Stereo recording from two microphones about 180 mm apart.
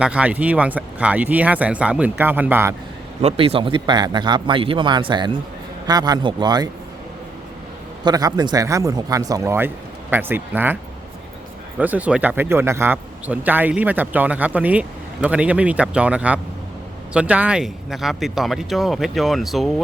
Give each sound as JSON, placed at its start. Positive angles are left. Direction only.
{"t": 0.0, "sound": "a man's voice", "side_deg": -5}
{"t": 3.2, "sound": "a man's voice", "side_deg": -35}
{"t": 8.0, "sound": "a man's voice", "side_deg": -20}
{"t": 11.8, "sound": "a man's voice", "side_deg": -10}